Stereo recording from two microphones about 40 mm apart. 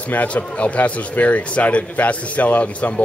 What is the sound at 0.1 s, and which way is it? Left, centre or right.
Speech, left.